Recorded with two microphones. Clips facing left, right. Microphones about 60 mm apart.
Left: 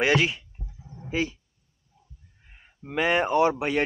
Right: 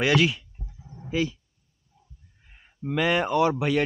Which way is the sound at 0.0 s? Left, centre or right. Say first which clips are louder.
Right 1 dB; left.